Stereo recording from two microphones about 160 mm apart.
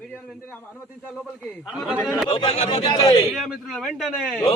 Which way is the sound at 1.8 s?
Centre (ahead or behind).